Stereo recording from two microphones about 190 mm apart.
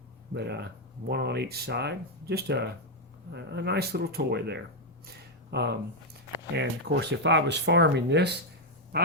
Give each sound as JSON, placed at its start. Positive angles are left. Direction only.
{"t": 0.3, "sound": "speech", "side_deg": -60}